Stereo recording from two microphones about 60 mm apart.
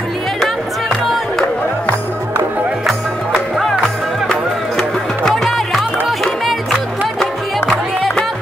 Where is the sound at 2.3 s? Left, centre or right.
Right.